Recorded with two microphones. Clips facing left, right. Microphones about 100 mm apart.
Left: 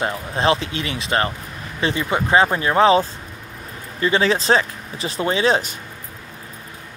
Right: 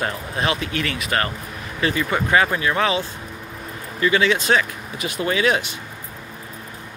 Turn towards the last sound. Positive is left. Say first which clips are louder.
# left 2 dB
turn(degrees=30)  # may be behind; listen again after turning